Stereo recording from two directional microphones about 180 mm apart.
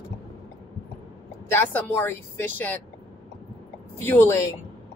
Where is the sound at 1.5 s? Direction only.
10° left (ahead or behind).